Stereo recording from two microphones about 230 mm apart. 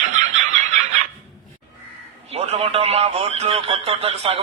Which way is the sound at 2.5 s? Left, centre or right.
Right.